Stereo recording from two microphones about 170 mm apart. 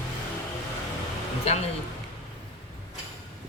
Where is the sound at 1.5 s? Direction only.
40° left (ahead or behind).